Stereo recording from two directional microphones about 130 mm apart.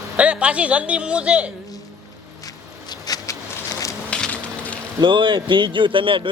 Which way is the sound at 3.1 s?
30° left (ahead or behind).